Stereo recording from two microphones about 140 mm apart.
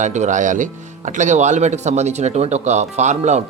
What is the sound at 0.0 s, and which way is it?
Speech, 60° right (ahead or behind).